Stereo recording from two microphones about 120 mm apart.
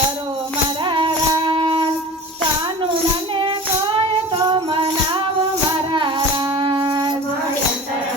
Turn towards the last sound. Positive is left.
turn(degrees=-40)  # may be behind; listen again after turning